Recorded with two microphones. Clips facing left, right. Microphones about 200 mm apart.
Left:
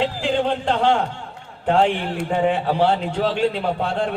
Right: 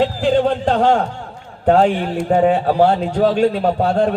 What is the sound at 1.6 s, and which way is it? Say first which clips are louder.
A man's voice: right 5 dB; 40° right (ahead or behind).